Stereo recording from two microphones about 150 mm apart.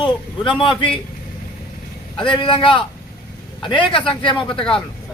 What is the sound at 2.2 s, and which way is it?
A man's voice, 35° left (ahead or behind).